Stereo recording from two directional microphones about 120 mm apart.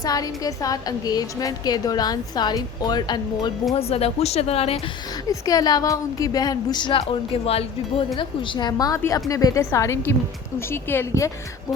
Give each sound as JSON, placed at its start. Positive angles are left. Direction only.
{"t": 0.0, "sound": "a woman's voice", "side_deg": 30}
{"t": 3.8, "sound": "speech", "side_deg": 55}
{"t": 5.3, "sound": "a woman's voice", "side_deg": 30}
{"t": 8.1, "sound": "a woman's voice", "side_deg": 45}